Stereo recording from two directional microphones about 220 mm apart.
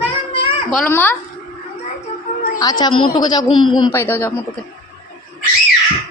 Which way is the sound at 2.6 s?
20° left (ahead or behind).